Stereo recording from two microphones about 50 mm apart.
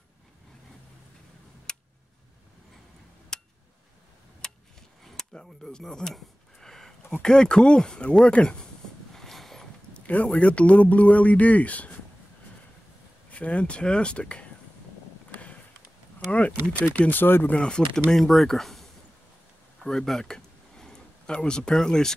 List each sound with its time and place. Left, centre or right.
1.7 s tick: centre
3.3 s a sound: centre
5.3 s speech: centre
9.1 s a sound: centre
10.0 s speech: left
13.3 s speech: left
16.3 s speech: left
16.9 s speech: left
17.6 s speech: centre
18.1 s speech: centre
19.8 s a sound: centre
21.7 s speech: centre